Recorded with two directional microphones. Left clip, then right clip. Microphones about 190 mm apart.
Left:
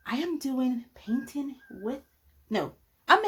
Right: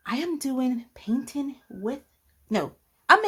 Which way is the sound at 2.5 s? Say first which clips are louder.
Right 3 dB; 30° right (ahead or behind).